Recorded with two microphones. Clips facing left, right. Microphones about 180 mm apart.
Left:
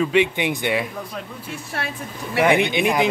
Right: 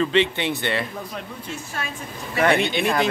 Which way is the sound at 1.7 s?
65° left (ahead or behind).